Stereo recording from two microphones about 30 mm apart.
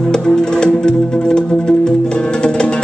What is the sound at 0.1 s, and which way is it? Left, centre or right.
Music, left.